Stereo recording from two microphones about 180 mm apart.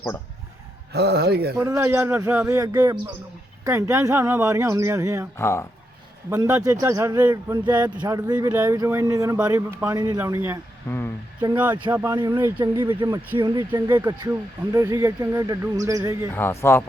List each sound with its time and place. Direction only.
0.9 s speech: 65° right (ahead or behind)
1.5 s speech: 15° right (ahead or behind)
5.4 s speech: 15° left (ahead or behind)
6.3 s speech: 20° right (ahead or behind)
10.8 s speech: 15° left (ahead or behind)
11.5 s speech: 10° right (ahead or behind)
16.3 s speech: 15° left (ahead or behind)